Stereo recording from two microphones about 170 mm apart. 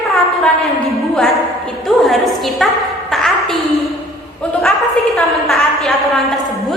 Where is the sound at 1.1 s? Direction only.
Centre (ahead or behind).